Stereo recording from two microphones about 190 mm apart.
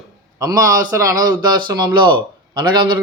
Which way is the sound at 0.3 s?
15° right (ahead or behind).